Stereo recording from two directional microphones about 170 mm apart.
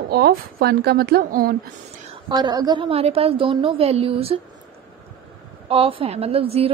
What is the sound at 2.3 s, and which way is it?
A woman's voice, 25° right (ahead or behind).